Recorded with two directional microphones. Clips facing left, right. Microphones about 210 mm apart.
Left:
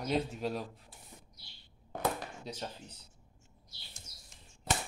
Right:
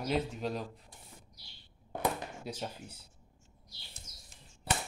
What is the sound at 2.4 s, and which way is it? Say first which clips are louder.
Speech: right 2 dB; 10° right (ahead or behind).